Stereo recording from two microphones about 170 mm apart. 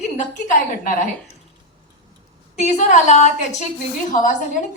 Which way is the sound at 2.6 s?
45° left (ahead or behind).